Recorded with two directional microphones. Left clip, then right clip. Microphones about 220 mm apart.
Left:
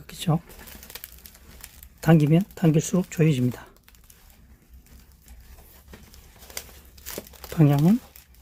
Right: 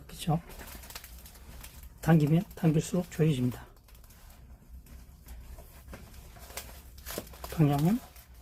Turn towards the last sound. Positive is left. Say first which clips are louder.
# left 6 dB
turn(degrees=40)  # may be behind; listen again after turning